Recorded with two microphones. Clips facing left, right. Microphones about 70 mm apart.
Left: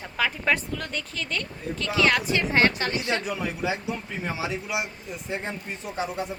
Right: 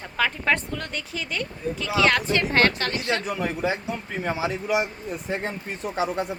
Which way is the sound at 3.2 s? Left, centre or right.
Right.